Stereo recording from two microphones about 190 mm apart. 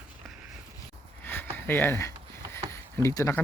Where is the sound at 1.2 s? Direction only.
10° left (ahead or behind).